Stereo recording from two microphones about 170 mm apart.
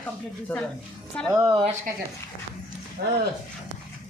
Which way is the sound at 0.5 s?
10° left (ahead or behind).